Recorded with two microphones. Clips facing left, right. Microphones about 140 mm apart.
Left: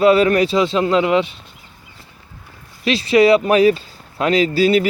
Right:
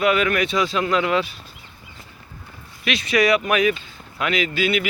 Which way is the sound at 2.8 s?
30° left (ahead or behind).